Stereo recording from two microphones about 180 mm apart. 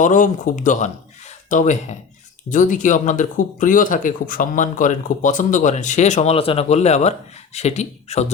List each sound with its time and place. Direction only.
0.0 s a man's voice: 45° left (ahead or behind)